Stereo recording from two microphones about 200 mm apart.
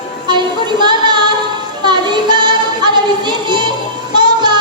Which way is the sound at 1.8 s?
20° right (ahead or behind).